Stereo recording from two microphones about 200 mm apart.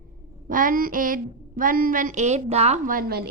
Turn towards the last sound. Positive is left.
turn(degrees=-50)  # may be behind; listen again after turning